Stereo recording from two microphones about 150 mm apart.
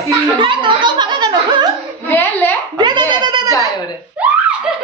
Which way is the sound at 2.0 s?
15° left (ahead or behind).